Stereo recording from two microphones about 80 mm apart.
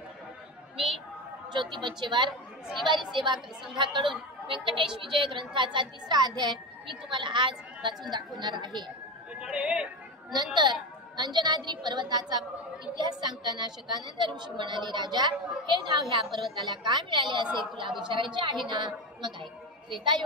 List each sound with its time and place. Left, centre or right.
1.5 s a woman's voice: right
3.7 s a woman's voice: right
8.1 s a woman's voice: right
9.4 s speech: centre
10.3 s a woman's voice: right
16.5 s a woman's voice: right